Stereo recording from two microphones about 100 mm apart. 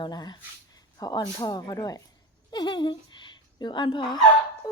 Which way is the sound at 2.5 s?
50° left (ahead or behind).